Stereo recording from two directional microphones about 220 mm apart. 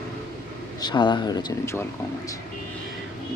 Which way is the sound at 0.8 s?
20° left (ahead or behind).